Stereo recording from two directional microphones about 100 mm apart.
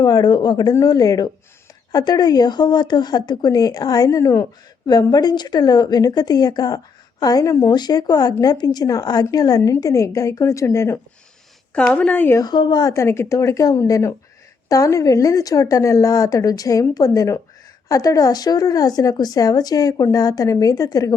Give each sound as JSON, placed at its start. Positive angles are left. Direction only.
{"t": 0.0, "sound": "a woman's voice", "side_deg": 40}
{"t": 4.9, "sound": "a woman's voice", "side_deg": 40}
{"t": 11.7, "sound": "a woman's voice", "side_deg": 15}
{"t": 12.4, "sound": "a woman's voice", "side_deg": 45}